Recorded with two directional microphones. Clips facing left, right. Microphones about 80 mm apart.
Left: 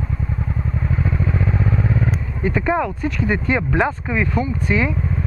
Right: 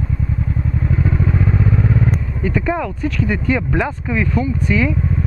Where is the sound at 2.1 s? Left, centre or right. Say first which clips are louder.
Right 2 dB; centre.